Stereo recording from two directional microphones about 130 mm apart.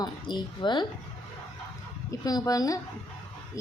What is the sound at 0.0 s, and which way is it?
Speech, 35° left (ahead or behind).